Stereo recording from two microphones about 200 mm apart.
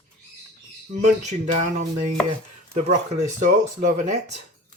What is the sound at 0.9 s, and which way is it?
Speech, 35° right (ahead or behind).